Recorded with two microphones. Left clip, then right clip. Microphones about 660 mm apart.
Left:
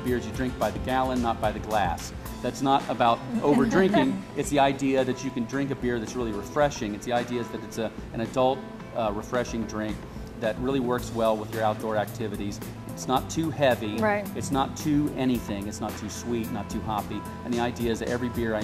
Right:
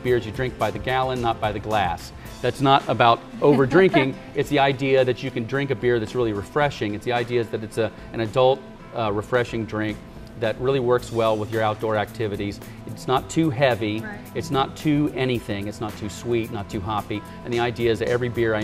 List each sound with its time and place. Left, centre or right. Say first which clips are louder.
0.1 s speech: right 7 dB; right
2.4 s speech: right 6 dB; right